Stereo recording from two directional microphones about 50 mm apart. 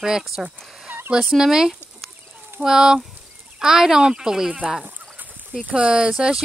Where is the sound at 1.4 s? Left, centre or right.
Centre.